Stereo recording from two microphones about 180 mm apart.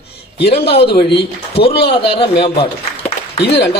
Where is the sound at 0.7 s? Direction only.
30° left (ahead or behind).